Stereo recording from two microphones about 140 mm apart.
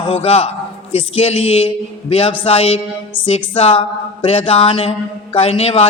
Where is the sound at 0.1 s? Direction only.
45° left (ahead or behind).